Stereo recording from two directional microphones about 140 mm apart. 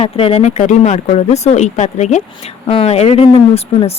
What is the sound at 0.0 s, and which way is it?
Speech, 45° left (ahead or behind).